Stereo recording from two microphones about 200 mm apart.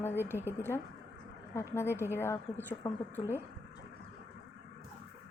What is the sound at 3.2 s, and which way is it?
Speech, 25° left (ahead or behind).